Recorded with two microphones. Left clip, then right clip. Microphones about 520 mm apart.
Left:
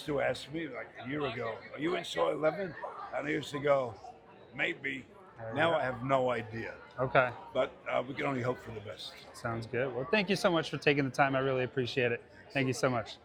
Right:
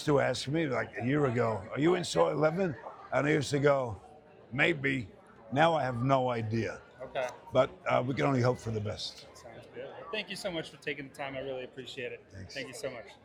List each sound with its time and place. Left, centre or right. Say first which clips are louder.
0.0 s speech: right 4 dB; right
7.0 s speech: left 10 dB; left
7.5 s speech: right 8 dB; right
9.4 s speech: left 11 dB; left